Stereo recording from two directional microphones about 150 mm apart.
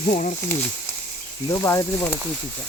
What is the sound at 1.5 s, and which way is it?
Speech, 20° left (ahead or behind).